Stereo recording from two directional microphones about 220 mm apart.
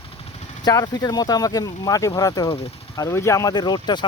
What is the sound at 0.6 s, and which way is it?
Speech, 15° left (ahead or behind).